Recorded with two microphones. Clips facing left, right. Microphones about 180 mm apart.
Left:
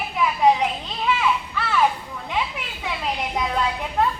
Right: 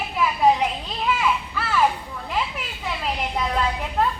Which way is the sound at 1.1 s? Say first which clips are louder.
Left 1 dB; 5° right (ahead or behind).